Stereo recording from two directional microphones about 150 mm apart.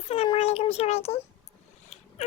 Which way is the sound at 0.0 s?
40° left (ahead or behind).